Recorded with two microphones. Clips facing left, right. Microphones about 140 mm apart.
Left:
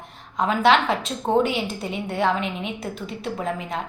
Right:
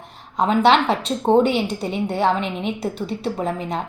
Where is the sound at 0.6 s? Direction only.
30° right (ahead or behind).